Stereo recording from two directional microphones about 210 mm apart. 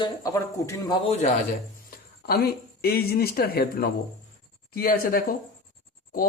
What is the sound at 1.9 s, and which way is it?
Speech, 45° left (ahead or behind).